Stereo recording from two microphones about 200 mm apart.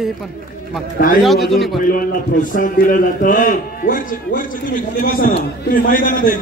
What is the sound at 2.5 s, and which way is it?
A man's voice, 45° left (ahead or behind).